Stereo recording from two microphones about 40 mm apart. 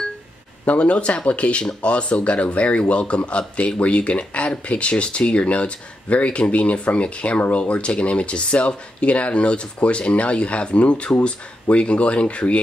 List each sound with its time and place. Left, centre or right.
0.7 s speech: left